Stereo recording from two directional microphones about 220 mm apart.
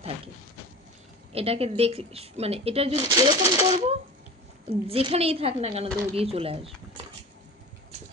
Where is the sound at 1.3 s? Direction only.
25° right (ahead or behind).